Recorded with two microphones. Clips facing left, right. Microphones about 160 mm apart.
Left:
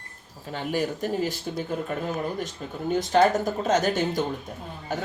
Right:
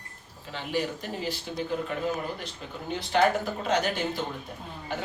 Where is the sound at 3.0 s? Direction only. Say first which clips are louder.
Left 3 dB; 45° left (ahead or behind).